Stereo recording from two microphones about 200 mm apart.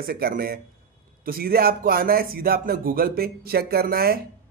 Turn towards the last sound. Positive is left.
turn(degrees=-50)  # may be behind; listen again after turning